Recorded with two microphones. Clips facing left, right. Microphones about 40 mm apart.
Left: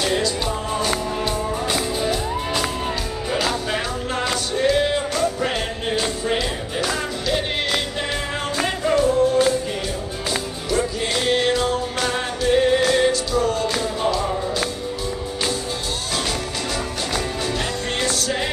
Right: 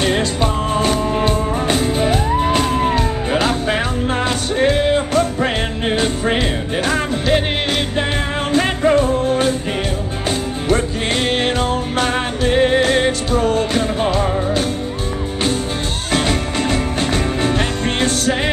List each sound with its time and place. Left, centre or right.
0.0 s music: right
10.7 s music: right
16.1 s music: right